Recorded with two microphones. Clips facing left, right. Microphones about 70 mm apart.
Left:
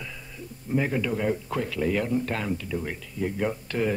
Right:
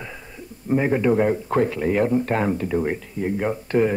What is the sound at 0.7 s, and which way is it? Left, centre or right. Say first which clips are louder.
Speech: right 7 dB; right.